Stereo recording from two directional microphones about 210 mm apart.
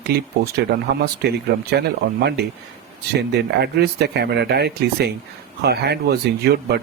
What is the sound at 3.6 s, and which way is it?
Speech, 50° right (ahead or behind).